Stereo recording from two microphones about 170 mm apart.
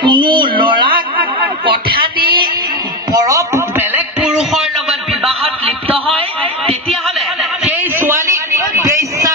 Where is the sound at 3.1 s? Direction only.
20° right (ahead or behind).